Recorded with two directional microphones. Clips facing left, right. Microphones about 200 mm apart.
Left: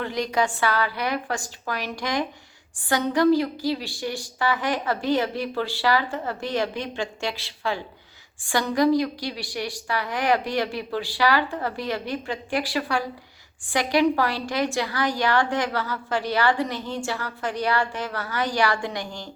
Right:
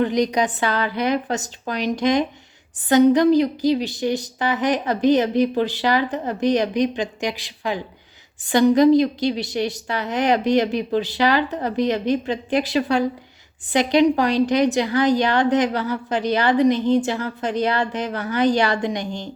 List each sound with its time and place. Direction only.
0.0 s a woman's voice: 20° right (ahead or behind)